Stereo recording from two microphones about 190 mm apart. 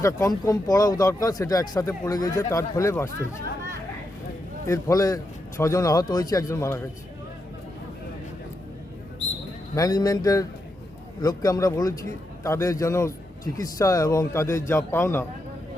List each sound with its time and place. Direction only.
0.0 s speech: 15° left (ahead or behind)
4.7 s a man's voice: 20° left (ahead or behind)
9.7 s a man's voice: 20° left (ahead or behind)